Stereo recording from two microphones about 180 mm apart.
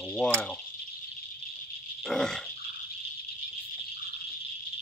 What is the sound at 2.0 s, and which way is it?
Speech, 5° left (ahead or behind).